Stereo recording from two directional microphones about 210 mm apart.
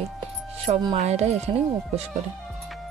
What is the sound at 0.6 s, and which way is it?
Music, 25° right (ahead or behind).